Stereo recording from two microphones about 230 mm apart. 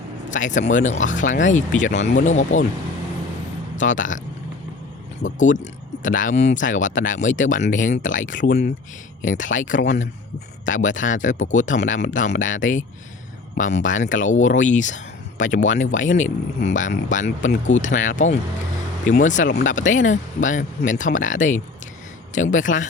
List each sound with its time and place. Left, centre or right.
0.3 s speech: left
3.8 s speech: left
5.2 s speech: left